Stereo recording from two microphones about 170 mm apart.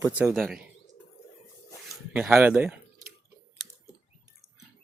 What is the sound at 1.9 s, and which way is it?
Speech, 5° right (ahead or behind).